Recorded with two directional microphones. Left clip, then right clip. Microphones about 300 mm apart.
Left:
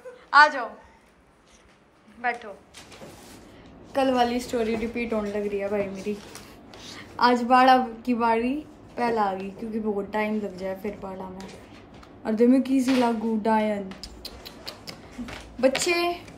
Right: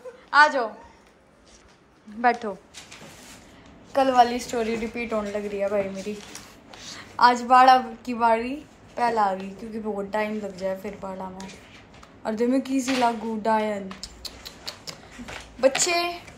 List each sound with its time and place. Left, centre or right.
0.3 s a woman's voice: centre
2.2 s a woman's voice: centre
3.9 s a woman's voice: centre